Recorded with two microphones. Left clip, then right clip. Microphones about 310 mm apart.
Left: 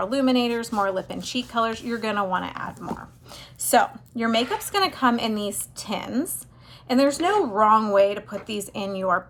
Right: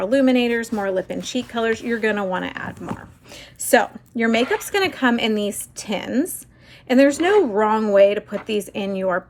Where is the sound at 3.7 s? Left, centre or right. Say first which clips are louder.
Right 3 dB; left.